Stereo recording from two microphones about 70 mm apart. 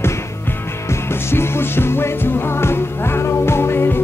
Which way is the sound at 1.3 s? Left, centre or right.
Left.